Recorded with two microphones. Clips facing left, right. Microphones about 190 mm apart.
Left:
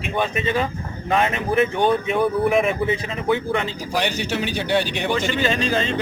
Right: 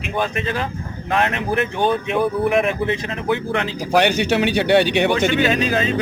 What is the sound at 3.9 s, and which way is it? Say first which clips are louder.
Speech: right 7 dB; 65° right (ahead or behind).